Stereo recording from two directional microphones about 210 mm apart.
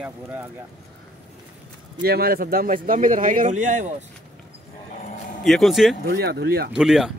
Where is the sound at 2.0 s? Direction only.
45° right (ahead or behind).